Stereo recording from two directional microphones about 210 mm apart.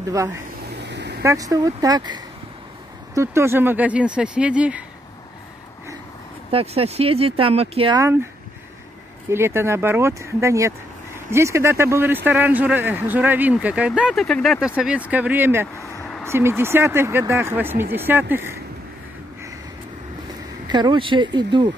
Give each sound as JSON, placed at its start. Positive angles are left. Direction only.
{"t": 0.8, "sound": "vehicle", "side_deg": -55}
{"t": 1.2, "sound": "a man's voice", "side_deg": -15}
{"t": 6.5, "sound": "speech", "side_deg": -30}
{"t": 8.0, "sound": "a man's voice", "side_deg": -10}
{"t": 9.3, "sound": "a man's voice", "side_deg": -10}
{"t": 20.6, "sound": "speech", "side_deg": -20}